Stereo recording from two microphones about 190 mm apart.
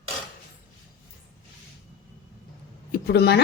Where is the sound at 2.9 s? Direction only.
60° left (ahead or behind).